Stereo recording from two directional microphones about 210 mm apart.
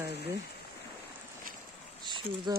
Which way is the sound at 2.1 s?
20° right (ahead or behind).